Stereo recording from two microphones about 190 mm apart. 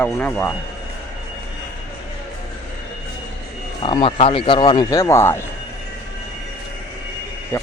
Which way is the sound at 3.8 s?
25° left (ahead or behind).